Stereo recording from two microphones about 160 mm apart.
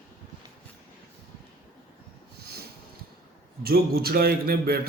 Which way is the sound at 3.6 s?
70° right (ahead or behind).